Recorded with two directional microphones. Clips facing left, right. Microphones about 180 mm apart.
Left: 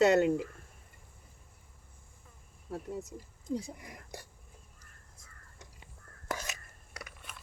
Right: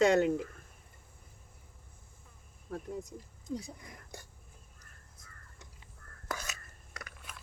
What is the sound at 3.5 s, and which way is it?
Speech, 30° left (ahead or behind).